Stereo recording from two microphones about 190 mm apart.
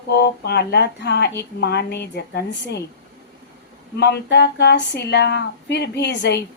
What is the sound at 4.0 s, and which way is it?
Speech, 60° left (ahead or behind).